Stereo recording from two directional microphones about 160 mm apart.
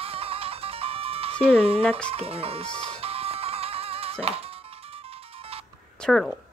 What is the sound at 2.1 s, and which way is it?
Speech, 35° right (ahead or behind).